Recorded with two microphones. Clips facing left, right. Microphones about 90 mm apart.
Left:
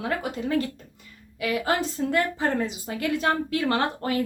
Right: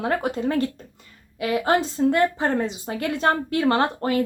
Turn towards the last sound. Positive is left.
turn(degrees=-30)  # may be behind; listen again after turning